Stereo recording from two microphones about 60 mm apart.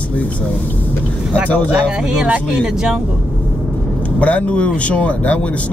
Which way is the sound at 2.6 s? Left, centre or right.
Centre.